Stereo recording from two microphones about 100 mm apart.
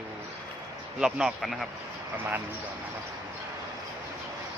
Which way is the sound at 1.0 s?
5° right (ahead or behind).